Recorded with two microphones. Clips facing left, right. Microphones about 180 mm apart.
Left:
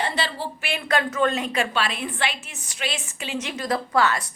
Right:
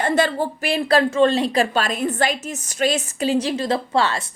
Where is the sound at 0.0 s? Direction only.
50° right (ahead or behind).